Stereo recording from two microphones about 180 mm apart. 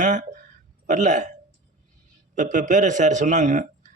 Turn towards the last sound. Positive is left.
turn(degrees=-45)  # may be behind; listen again after turning